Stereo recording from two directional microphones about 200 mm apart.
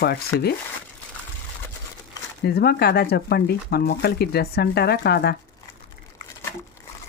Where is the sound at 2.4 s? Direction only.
50° left (ahead or behind).